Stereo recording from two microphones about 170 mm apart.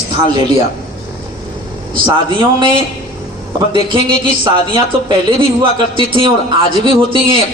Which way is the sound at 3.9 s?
30° right (ahead or behind).